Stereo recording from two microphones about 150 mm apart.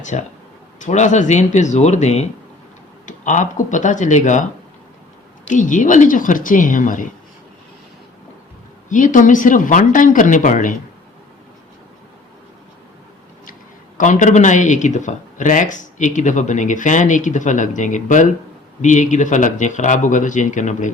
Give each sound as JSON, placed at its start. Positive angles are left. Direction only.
{"t": 0.0, "sound": "speech", "side_deg": 50}
{"t": 5.5, "sound": "speech", "side_deg": 55}
{"t": 8.9, "sound": "speech", "side_deg": 60}
{"t": 14.0, "sound": "speech", "side_deg": 55}